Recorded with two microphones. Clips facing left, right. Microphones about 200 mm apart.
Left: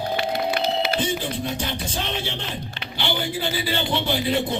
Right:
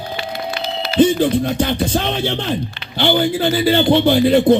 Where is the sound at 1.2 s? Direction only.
60° right (ahead or behind).